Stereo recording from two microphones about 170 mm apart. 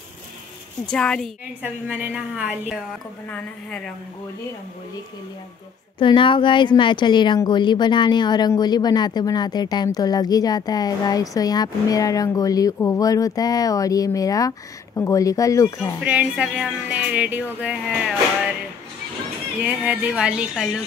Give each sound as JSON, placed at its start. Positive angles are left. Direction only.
{"t": 0.8, "sound": "speech", "side_deg": 5}
{"t": 1.6, "sound": "speech", "side_deg": -10}
{"t": 3.3, "sound": "speech", "side_deg": 10}
{"t": 5.9, "sound": "speech", "side_deg": 30}
{"t": 16.0, "sound": "speech", "side_deg": -10}
{"t": 19.6, "sound": "speech", "side_deg": -10}